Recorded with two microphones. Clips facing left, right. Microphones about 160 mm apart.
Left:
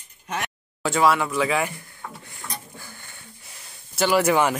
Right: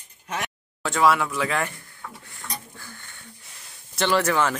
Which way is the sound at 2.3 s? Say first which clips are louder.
Even; 10° left (ahead or behind).